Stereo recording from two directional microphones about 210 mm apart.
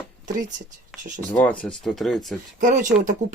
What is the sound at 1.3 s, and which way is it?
Speech, 5° left (ahead or behind).